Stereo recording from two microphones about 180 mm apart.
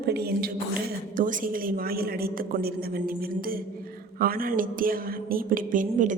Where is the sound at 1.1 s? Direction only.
50° right (ahead or behind).